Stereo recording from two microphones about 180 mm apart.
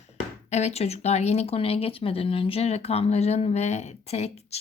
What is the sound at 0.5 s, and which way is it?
Speech, 35° left (ahead or behind).